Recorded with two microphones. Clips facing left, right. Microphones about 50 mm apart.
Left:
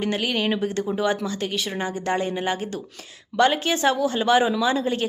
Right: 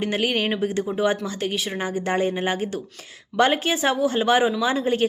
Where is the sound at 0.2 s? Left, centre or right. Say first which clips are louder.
Right 1 dB; right.